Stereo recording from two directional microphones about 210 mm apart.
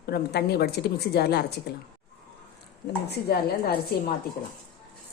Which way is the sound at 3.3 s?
45° left (ahead or behind).